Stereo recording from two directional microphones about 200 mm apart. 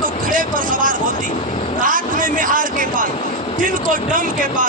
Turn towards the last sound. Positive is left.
turn(degrees=-40)  # may be behind; listen again after turning